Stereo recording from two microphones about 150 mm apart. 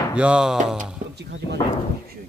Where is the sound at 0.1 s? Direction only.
5° right (ahead or behind).